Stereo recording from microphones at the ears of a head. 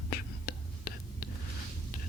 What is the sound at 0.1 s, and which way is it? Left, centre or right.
Whispering, left.